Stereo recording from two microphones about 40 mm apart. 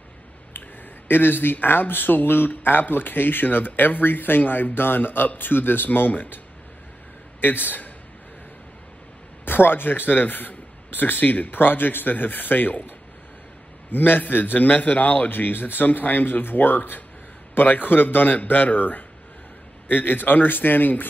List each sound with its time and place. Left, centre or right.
0.5 s a man's voice: left
9.4 s a man's voice: left